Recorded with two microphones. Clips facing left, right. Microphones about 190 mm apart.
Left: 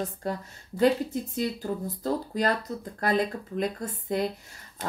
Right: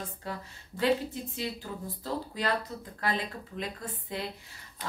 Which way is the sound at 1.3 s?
45° left (ahead or behind).